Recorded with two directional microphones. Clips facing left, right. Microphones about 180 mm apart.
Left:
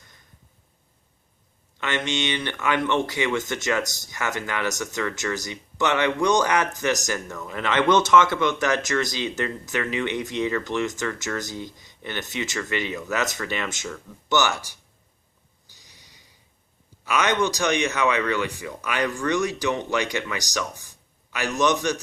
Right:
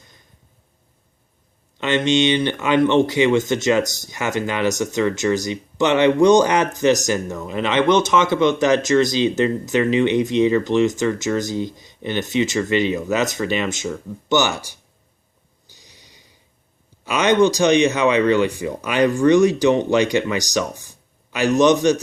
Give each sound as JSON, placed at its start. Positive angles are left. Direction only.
{"t": 1.8, "sound": "speech", "side_deg": -25}
{"t": 17.1, "sound": "speech", "side_deg": -25}